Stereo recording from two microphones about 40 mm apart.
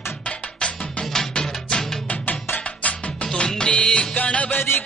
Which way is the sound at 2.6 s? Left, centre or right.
Left.